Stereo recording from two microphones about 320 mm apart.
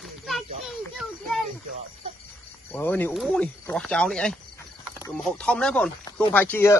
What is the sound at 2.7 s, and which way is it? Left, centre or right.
Speech, centre.